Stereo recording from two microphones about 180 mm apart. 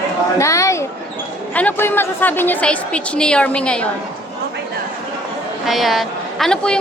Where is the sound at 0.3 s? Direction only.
15° left (ahead or behind).